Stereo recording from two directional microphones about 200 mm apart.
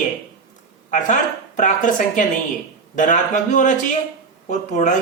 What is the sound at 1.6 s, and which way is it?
Speech, 40° left (ahead or behind).